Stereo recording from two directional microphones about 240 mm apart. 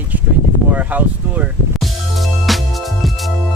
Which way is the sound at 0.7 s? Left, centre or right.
Centre.